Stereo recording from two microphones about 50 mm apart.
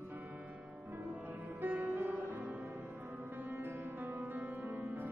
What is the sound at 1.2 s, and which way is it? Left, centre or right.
Music, right.